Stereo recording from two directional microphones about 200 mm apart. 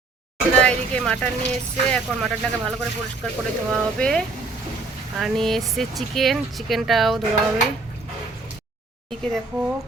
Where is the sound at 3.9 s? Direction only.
5° left (ahead or behind).